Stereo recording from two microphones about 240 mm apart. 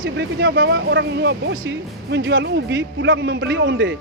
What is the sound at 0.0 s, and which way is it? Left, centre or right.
Speech, right.